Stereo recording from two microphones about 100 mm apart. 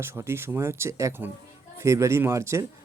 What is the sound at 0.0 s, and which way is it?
Speech, 25° right (ahead or behind).